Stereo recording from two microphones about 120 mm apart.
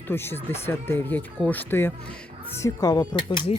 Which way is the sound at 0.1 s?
20° left (ahead or behind).